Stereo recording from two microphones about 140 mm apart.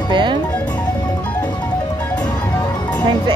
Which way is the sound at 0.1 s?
35° right (ahead or behind).